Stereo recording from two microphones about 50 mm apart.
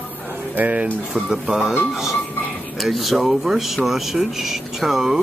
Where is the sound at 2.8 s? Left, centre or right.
Centre.